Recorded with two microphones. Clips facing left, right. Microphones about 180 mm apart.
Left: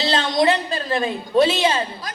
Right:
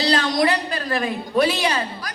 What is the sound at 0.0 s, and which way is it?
A child's voice, 25° left (ahead or behind).